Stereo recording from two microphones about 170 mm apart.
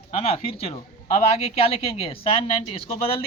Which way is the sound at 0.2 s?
35° left (ahead or behind).